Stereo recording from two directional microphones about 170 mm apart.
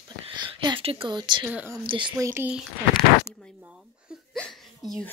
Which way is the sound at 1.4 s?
10° right (ahead or behind).